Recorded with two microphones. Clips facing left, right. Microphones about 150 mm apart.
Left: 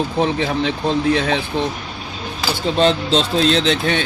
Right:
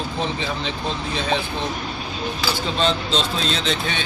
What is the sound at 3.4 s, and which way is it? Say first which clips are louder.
Speech: left 8 dB; 75° left (ahead or behind).